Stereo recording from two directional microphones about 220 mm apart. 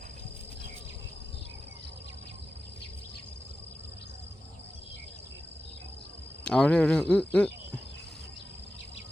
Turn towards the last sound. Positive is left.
turn(degrees=5)  # may be behind; listen again after turning